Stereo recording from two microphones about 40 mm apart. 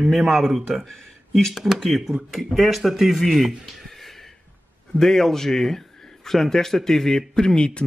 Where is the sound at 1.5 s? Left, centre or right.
Centre.